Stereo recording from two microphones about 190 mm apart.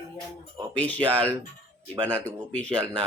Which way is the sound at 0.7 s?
10° left (ahead or behind).